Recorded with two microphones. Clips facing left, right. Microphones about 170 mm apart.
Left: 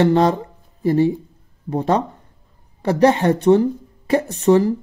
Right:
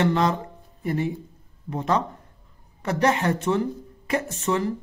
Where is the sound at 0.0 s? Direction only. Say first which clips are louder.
Left 7 dB; 35° left (ahead or behind).